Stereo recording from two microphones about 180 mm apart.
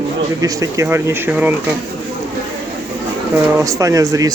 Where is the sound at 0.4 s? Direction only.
20° right (ahead or behind).